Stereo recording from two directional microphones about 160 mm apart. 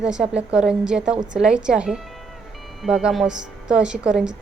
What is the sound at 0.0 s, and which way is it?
Speech, 5° right (ahead or behind).